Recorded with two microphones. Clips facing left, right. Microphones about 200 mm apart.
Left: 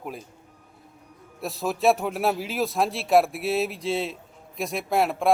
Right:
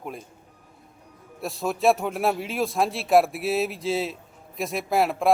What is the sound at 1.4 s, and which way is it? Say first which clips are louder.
A man's voice: even; centre (ahead or behind).